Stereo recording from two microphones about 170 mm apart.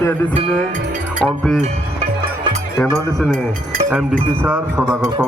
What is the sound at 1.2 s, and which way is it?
Speech, 5° left (ahead or behind).